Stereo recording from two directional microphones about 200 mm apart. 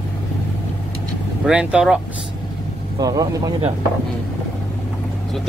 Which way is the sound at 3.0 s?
20° right (ahead or behind).